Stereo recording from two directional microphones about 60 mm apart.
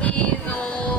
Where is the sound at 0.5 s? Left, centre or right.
Left.